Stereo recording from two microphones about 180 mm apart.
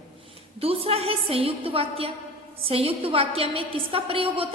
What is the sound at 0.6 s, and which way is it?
A woman's voice, 35° right (ahead or behind).